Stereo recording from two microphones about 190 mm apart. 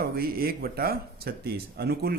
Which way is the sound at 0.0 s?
55° right (ahead or behind).